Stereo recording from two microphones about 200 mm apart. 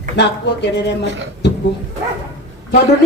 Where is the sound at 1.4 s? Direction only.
60° left (ahead or behind).